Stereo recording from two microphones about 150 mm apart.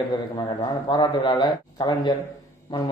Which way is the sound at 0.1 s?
25° left (ahead or behind).